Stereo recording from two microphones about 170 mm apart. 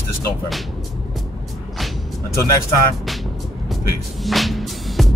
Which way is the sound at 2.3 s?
20° left (ahead or behind).